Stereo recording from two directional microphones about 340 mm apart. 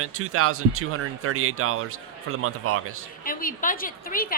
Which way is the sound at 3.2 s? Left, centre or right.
Left.